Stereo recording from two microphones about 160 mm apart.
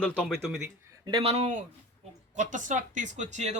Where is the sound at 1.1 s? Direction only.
35° right (ahead or behind).